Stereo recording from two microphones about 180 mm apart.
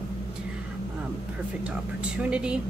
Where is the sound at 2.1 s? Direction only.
5° right (ahead or behind).